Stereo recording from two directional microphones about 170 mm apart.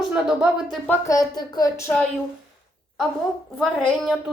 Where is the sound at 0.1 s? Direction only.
5° right (ahead or behind).